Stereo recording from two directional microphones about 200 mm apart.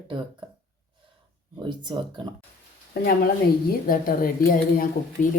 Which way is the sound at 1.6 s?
25° right (ahead or behind).